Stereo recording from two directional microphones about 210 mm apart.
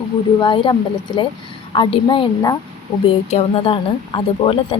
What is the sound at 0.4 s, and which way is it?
Speech, 25° left (ahead or behind).